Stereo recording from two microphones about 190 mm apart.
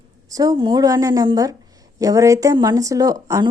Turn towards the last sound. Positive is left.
turn(degrees=-15)  # may be behind; listen again after turning